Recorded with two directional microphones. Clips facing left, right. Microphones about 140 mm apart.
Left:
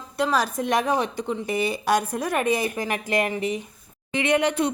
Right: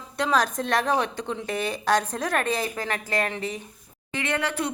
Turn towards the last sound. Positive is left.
turn(degrees=20)  # may be behind; listen again after turning